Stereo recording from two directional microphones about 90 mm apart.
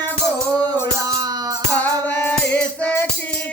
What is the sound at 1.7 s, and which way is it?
Music, 20° left (ahead or behind).